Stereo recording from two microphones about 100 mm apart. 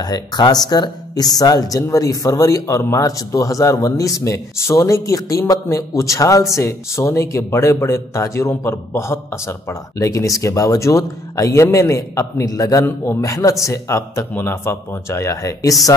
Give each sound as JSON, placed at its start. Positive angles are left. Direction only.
{"t": 0.0, "sound": "speech", "side_deg": 45}